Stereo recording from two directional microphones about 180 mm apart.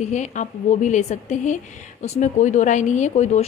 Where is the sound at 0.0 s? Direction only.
40° left (ahead or behind).